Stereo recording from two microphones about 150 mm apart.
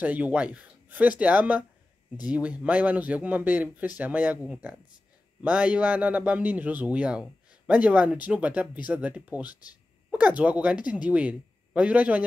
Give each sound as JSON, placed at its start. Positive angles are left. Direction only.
{"t": 0.0, "sound": "a man's voice", "side_deg": -10}